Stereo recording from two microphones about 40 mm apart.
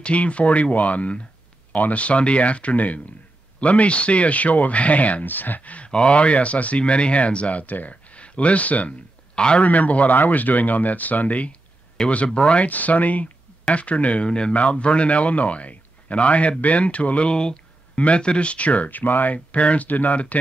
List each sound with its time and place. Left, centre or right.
0.0 s speech: left
5.2 s speech: left
5.9 s speech: left
7.9 s speech: left
9.3 s a man's voice: left
9.6 s speech: left
12.0 s speech: centre
12.4 s speech: left
12.6 s a man's voice: left
19.3 s speech: left